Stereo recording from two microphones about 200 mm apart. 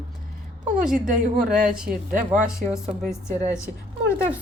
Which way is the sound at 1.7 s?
5° right (ahead or behind).